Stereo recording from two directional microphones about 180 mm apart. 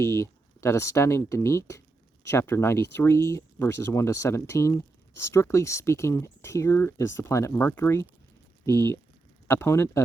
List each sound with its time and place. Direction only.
0.0 s speech: 15° left (ahead or behind)